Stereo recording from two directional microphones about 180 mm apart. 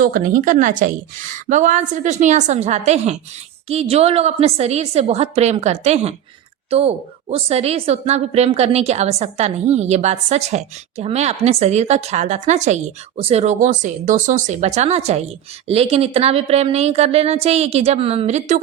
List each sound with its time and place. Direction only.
0.0 s a woman's voice: 50° right (ahead or behind)